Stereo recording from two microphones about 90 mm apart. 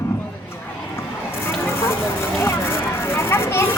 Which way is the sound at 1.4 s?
30° left (ahead or behind).